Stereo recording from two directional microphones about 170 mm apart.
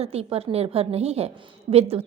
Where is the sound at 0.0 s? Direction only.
35° right (ahead or behind).